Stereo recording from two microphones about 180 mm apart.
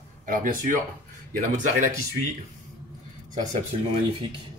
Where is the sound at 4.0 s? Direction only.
30° right (ahead or behind).